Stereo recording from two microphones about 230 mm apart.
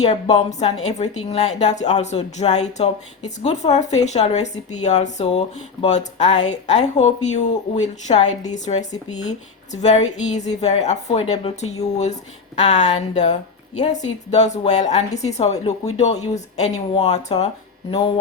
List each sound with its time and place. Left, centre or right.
0.6 s a woman's voice: left